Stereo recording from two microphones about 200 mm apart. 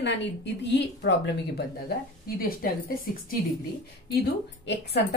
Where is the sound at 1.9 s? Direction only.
50° left (ahead or behind).